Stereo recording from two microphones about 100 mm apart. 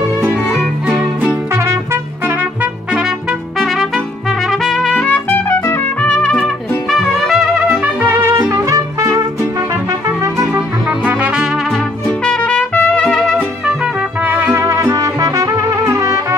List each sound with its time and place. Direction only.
1.5 s trumpet: 25° right (ahead or behind); by 6.5 s 10° left (ahead or behind)
6.9 s trumpet: centre (ahead or behind)
7.8 s music: 20° right (ahead or behind); by 9.5 s 35° right (ahead or behind)
10.0 s trumpet: 30° right (ahead or behind)
10.5 s music: 15° right (ahead or behind)
11.7 s trumpet: 10° left (ahead or behind)
14.2 s music: 15° right (ahead or behind)